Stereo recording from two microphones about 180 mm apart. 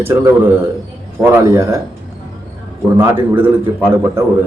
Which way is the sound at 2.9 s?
10° right (ahead or behind).